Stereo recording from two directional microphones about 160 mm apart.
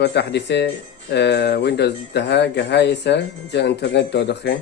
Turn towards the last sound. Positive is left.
turn(degrees=90)